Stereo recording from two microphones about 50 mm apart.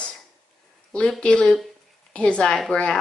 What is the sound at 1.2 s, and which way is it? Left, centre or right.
A woman's voice, left.